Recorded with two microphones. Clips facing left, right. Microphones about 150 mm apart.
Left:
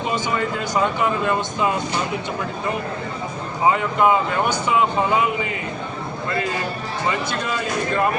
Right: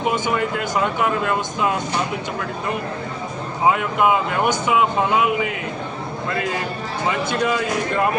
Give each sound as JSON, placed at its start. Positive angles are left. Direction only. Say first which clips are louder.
{"t": 1.0, "sound": "speech", "louder": "even", "side_deg": 0}
{"t": 3.7, "sound": "speech", "louder": "even", "side_deg": -5}